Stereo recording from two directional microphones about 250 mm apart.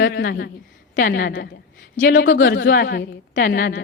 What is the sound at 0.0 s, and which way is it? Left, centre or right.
A woman's voice, left.